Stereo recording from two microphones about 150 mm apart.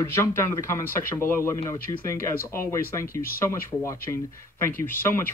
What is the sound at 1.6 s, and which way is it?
Speech, 30° left (ahead or behind).